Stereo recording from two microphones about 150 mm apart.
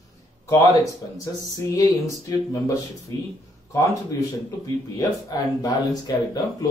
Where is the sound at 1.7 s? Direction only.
25° left (ahead or behind).